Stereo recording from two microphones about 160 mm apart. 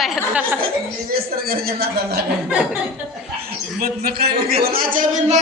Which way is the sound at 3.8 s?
75° right (ahead or behind).